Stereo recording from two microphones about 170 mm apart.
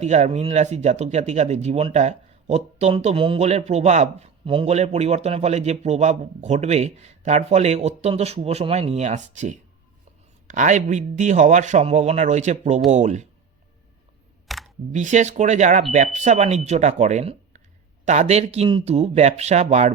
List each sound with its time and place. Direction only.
0.0 s speech: 45° right (ahead or behind)
14.4 s camera: centre (ahead or behind)
14.9 s speech: 45° right (ahead or behind)